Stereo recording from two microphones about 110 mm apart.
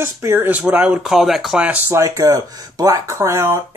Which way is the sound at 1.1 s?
Centre (ahead or behind).